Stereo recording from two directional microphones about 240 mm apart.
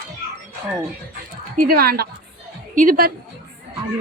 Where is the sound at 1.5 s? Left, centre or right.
Right.